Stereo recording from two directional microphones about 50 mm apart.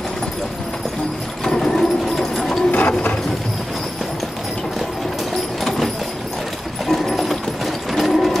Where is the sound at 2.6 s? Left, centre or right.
Left.